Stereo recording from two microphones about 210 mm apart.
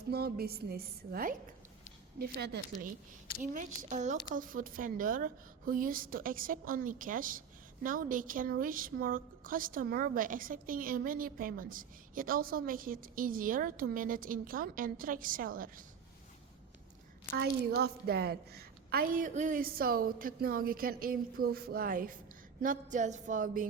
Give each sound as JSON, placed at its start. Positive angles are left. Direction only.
{"t": 0.1, "sound": "a woman's voice", "side_deg": -45}
{"t": 3.4, "sound": "a woman's voice", "side_deg": -40}
{"t": 17.3, "sound": "a woman's voice", "side_deg": -50}